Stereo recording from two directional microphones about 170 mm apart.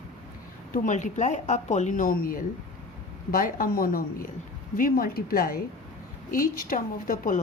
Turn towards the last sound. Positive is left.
turn(degrees=50)  # may be behind; listen again after turning